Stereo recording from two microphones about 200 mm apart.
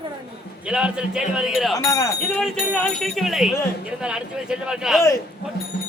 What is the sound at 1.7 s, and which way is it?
Speech, 15° left (ahead or behind).